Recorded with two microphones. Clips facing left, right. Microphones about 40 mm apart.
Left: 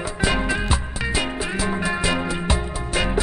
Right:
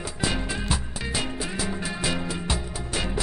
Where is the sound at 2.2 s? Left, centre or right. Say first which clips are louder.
Left 6 dB; left.